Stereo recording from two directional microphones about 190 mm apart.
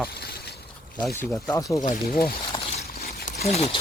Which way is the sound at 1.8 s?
45° left (ahead or behind).